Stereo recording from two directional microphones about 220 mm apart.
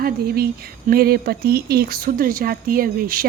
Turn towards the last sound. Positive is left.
turn(degrees=-40)  # may be behind; listen again after turning